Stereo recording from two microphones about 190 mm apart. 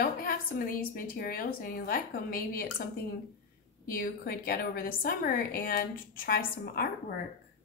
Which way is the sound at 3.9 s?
50° left (ahead or behind).